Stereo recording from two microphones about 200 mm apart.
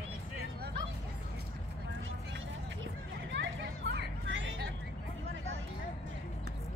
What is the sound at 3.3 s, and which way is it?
Hubbub, 60° right (ahead or behind).